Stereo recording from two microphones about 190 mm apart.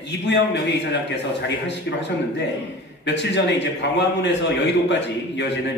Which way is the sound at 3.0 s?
65° left (ahead or behind).